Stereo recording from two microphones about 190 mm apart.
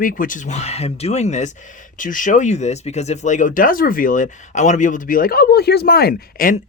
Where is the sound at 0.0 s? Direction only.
45° left (ahead or behind).